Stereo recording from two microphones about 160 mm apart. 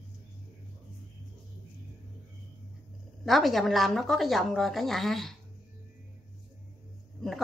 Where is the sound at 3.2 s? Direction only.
Centre (ahead or behind).